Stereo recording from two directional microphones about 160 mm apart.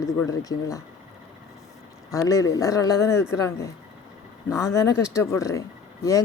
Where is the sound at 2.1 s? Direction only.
20° left (ahead or behind).